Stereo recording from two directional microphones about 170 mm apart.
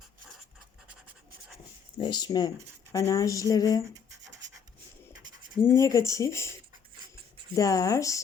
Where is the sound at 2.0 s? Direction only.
25° left (ahead or behind).